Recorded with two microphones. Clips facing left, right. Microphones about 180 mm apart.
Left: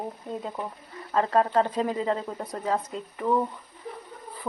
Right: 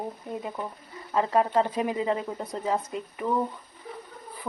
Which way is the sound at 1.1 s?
15° right (ahead or behind).